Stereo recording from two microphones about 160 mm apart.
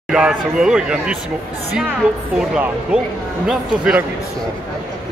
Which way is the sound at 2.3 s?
5° right (ahead or behind).